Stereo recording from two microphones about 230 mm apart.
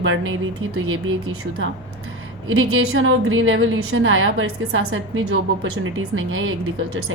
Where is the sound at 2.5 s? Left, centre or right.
Right.